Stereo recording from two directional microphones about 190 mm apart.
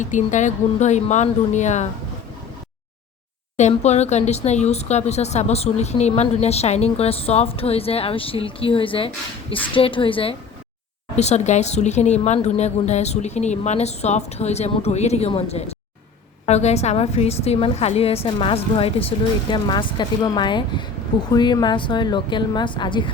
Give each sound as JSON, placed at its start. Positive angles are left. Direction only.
{"t": 0.0, "sound": "speech", "side_deg": 40}
{"t": 3.6, "sound": "a woman's voice", "side_deg": 35}